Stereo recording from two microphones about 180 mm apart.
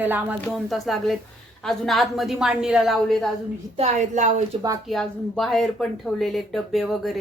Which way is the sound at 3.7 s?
40° right (ahead or behind).